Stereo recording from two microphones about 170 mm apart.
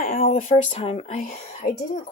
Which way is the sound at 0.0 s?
55° left (ahead or behind).